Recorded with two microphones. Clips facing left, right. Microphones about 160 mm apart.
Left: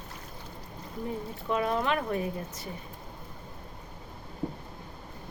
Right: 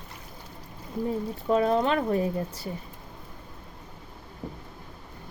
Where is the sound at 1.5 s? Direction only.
30° right (ahead or behind).